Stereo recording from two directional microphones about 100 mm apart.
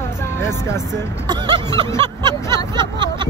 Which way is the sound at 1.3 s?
45° right (ahead or behind).